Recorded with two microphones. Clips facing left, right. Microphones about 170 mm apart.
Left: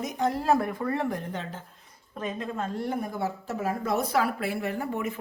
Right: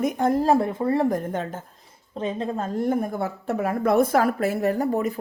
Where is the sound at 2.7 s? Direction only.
50° right (ahead or behind).